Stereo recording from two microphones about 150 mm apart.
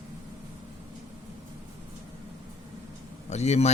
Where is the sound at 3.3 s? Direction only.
50° left (ahead or behind).